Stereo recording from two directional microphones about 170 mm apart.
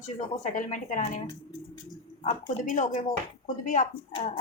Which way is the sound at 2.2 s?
35° left (ahead or behind).